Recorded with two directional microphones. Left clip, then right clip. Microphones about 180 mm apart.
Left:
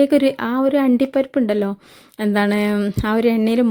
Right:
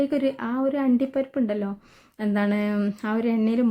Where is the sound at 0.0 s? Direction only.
45° left (ahead or behind).